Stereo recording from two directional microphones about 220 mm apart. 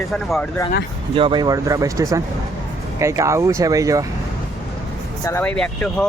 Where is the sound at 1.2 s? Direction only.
20° right (ahead or behind).